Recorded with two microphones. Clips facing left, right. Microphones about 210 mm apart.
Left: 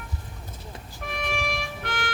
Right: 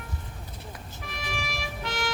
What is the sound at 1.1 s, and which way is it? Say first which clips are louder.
Music: left 6 dB; 60° left (ahead or behind).